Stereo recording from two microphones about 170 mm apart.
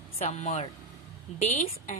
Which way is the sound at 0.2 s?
40° left (ahead or behind).